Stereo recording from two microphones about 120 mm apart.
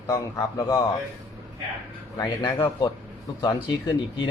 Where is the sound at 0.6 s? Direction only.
25° left (ahead or behind).